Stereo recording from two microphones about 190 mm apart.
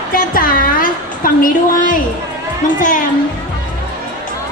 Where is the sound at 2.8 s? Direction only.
45° left (ahead or behind).